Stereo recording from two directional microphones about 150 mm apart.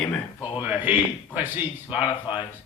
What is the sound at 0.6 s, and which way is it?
A man's voice, 10° right (ahead or behind).